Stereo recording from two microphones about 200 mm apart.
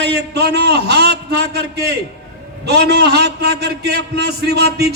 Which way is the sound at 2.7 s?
55° right (ahead or behind).